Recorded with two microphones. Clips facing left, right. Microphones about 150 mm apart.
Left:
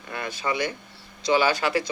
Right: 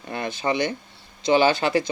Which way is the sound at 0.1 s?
25° right (ahead or behind).